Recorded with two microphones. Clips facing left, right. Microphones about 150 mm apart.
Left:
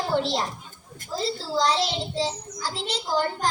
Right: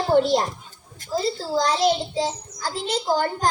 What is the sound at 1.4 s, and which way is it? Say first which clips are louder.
A child's voice: right 2 dB; 50° right (ahead or behind).